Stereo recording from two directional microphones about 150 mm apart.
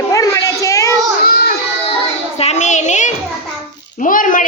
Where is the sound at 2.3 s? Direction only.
45° left (ahead or behind).